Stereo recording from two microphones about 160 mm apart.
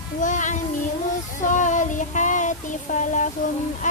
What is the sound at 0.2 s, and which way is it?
Child singing, 50° left (ahead or behind).